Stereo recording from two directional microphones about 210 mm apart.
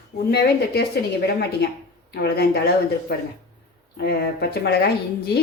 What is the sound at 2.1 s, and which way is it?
A woman's voice, 50° left (ahead or behind).